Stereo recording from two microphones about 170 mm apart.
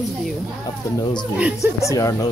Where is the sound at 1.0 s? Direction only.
25° left (ahead or behind).